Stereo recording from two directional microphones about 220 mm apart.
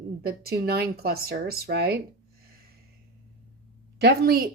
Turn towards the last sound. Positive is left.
turn(degrees=-45)  # may be behind; listen again after turning